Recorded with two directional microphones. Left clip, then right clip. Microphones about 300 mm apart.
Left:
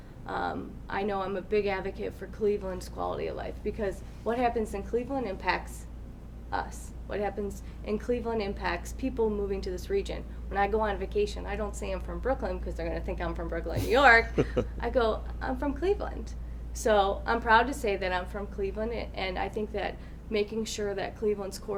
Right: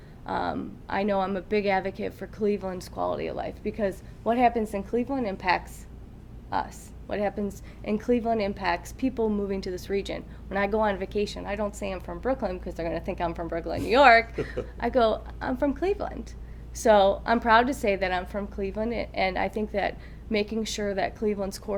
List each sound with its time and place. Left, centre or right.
0.3 s a woman's voice: right